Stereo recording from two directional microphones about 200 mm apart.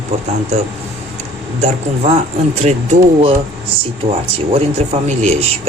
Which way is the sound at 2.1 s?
35° right (ahead or behind).